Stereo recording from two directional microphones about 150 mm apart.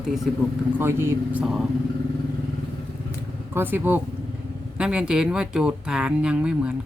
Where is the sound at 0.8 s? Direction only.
15° right (ahead or behind).